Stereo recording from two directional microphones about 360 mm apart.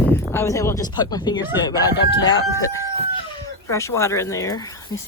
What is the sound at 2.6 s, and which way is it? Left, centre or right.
Speech, centre.